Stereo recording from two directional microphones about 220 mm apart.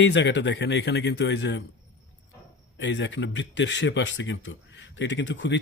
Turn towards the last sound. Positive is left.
turn(degrees=55)  # may be behind; listen again after turning